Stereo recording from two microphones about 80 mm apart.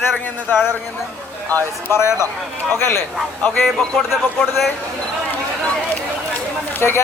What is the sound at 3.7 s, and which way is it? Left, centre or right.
Speech, centre.